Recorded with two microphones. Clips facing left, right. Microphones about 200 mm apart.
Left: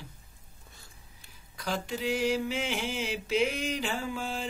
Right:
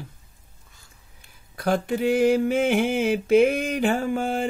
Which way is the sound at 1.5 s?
55° right (ahead or behind).